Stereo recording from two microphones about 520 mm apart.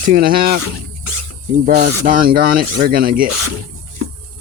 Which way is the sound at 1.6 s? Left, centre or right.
Centre.